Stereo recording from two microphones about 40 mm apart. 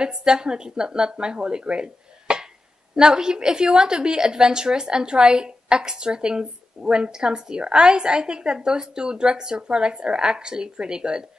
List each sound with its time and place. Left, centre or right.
0.0 s a woman's voice: right